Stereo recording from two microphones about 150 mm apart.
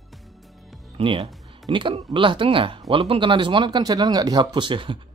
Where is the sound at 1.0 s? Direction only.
35° right (ahead or behind).